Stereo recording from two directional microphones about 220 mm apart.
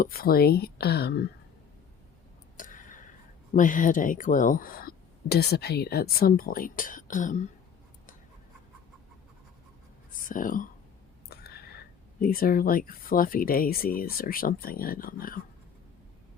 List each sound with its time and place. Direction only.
0.0 s speech: 45° left (ahead or behind)
2.6 s a sound: 35° left (ahead or behind)
3.5 s speech: 35° left (ahead or behind)
10.2 s speech: 35° left (ahead or behind)